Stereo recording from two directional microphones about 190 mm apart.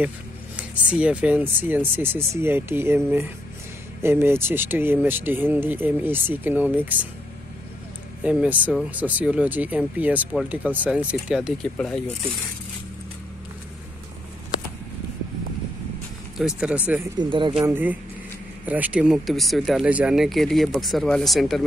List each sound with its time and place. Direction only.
0.6 s speech: 5° right (ahead or behind)
8.2 s speech: 5° right (ahead or behind)
16.3 s speech: 5° right (ahead or behind)
17.2 s speech: 25° right (ahead or behind)
17.6 s speech: 10° right (ahead or behind)